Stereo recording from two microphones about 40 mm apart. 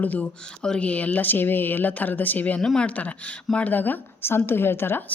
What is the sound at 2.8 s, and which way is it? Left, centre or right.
Speech, left.